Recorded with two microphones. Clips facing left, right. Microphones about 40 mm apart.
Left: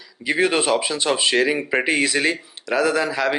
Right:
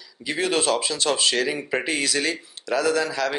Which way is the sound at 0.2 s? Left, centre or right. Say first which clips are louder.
Left 4 dB; left.